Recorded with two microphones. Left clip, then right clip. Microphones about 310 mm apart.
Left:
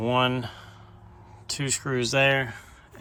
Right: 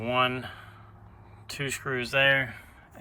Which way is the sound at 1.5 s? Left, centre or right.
Centre.